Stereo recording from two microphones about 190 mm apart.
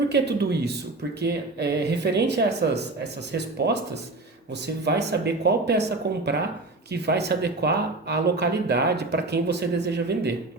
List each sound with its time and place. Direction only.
0.1 s speech: 60° right (ahead or behind)